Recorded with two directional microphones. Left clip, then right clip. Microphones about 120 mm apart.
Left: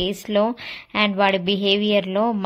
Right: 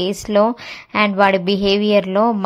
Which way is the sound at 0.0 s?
35° right (ahead or behind).